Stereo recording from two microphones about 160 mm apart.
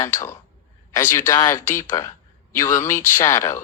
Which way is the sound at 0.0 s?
15° left (ahead or behind).